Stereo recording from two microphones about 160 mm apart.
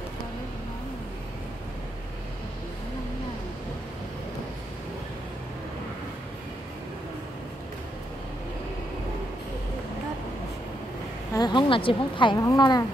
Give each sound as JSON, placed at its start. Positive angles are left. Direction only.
{"t": 11.3, "sound": "speech", "side_deg": 30}